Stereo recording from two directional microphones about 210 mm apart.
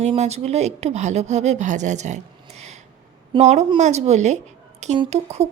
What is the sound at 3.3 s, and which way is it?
A woman's voice, 30° right (ahead or behind).